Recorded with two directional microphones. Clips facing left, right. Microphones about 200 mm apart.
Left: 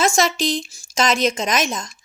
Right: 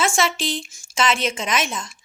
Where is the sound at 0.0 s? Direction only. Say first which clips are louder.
Left 3 dB; 40° left (ahead or behind).